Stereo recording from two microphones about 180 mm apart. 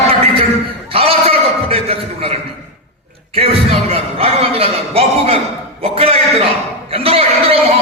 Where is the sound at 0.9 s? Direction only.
35° right (ahead or behind).